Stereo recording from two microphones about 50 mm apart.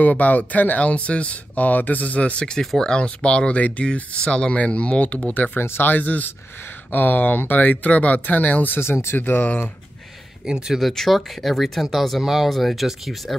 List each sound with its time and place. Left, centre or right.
0.0 s speech: left
2.6 s speech: centre
2.9 s speech: left
5.6 s speech: left
8.7 s speech: left
10.4 s speech: centre
10.8 s speech: centre